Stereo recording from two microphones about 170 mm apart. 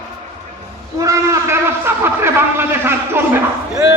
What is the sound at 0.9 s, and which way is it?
A man's voice, 20° right (ahead or behind).